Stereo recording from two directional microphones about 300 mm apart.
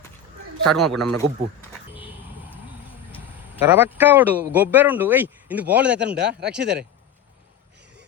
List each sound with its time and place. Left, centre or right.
0.6 s a man's voice: centre
3.5 s a man's voice: centre
6.1 s speech: right